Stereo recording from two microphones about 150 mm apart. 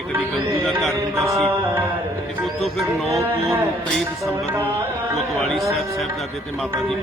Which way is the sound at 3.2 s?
15° right (ahead or behind).